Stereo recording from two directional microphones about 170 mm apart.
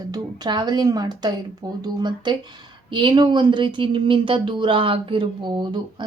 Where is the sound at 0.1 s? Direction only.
25° right (ahead or behind).